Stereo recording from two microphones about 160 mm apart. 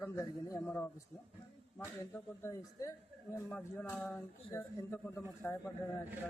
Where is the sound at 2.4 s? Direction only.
20° left (ahead or behind).